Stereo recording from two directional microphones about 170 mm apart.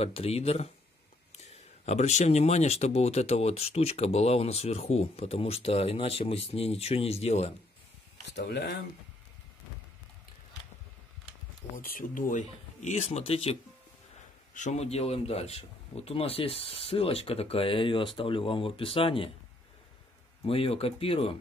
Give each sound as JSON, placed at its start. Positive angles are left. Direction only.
{"t": 0.0, "sound": "speech", "side_deg": 35}
{"t": 1.9, "sound": "speech", "side_deg": 40}
{"t": 8.3, "sound": "speech", "side_deg": 85}
{"t": 11.7, "sound": "speech", "side_deg": 55}
{"t": 20.4, "sound": "speech", "side_deg": 35}